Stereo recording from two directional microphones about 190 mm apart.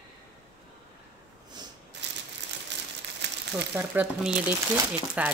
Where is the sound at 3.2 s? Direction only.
65° right (ahead or behind).